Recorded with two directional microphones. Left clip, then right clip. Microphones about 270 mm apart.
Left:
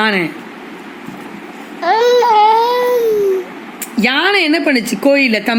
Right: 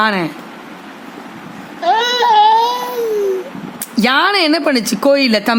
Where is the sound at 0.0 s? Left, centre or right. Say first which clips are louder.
Even; right.